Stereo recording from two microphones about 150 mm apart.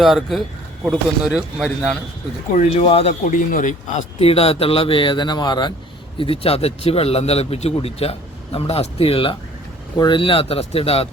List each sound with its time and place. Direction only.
0.0 s a man's voice: centre (ahead or behind)
2.6 s speech: 40° left (ahead or behind)
3.2 s speech: 60° left (ahead or behind)
4.2 s speech: 40° left (ahead or behind)